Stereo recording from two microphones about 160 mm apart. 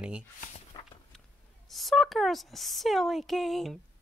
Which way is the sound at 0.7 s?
25° left (ahead or behind).